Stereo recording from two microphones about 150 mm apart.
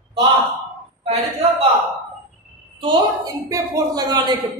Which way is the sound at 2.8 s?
35° right (ahead or behind).